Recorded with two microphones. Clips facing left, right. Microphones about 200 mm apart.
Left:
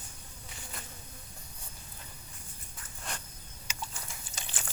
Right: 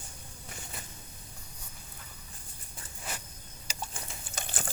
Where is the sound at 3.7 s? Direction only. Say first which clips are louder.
Right 1 dB; 35° right (ahead or behind).